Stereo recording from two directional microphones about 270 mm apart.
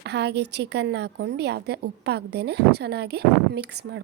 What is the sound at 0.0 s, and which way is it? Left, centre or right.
A woman's voice, right.